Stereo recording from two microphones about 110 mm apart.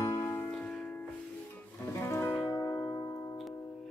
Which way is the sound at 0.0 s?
25° left (ahead or behind).